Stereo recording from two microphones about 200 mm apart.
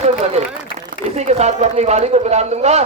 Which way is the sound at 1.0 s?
35° right (ahead or behind).